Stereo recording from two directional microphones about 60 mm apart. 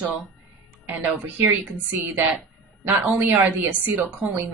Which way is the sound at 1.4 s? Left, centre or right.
Right.